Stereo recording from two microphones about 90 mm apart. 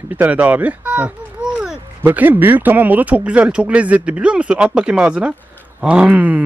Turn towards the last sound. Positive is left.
turn(degrees=-15)  # may be behind; listen again after turning